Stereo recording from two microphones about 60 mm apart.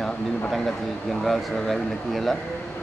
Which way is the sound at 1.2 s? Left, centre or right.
Centre.